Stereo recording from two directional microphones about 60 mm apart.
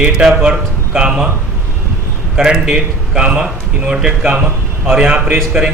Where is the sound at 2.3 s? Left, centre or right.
Centre.